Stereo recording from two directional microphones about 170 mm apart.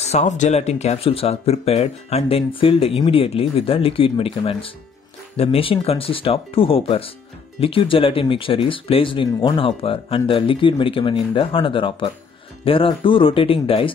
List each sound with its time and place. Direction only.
0.0 s speech: 40° left (ahead or behind)